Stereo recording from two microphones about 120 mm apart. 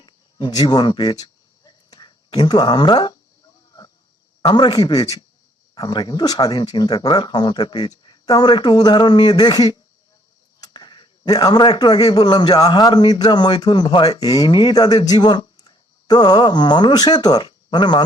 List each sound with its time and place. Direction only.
0.0 s insect: 40° left (ahead or behind)
4.4 s speech: 35° left (ahead or behind)